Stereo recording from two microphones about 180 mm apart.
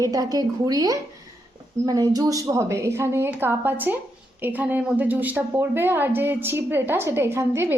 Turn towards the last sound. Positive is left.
turn(degrees=-15)  # may be behind; listen again after turning